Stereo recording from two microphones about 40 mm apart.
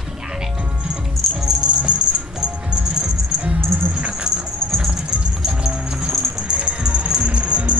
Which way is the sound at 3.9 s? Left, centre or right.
Right.